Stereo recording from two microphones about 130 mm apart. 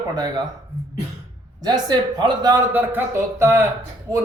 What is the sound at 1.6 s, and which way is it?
Speech, 30° right (ahead or behind).